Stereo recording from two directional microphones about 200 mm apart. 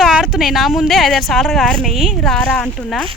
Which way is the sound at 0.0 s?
Centre (ahead or behind).